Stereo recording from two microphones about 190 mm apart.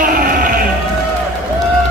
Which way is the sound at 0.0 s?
45° right (ahead or behind).